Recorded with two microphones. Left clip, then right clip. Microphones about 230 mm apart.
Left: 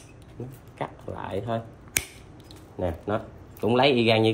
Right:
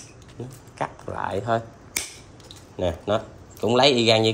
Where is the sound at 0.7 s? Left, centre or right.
Centre.